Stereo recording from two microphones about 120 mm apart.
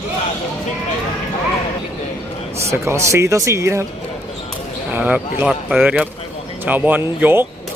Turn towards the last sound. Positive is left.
turn(degrees=-15)  # may be behind; listen again after turning